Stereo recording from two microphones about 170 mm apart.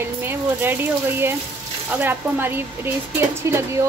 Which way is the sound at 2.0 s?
10° right (ahead or behind).